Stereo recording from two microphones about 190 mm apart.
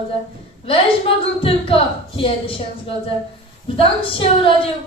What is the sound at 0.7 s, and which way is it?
A woman's voice, 30° left (ahead or behind).